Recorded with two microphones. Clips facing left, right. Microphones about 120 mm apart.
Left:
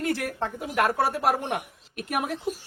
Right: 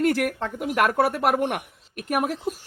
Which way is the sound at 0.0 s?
60° right (ahead or behind).